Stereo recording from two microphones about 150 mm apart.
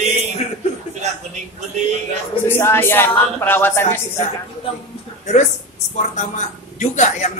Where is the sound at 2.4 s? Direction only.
15° left (ahead or behind).